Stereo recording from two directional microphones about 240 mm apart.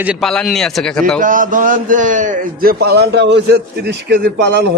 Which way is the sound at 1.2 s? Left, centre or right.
Right.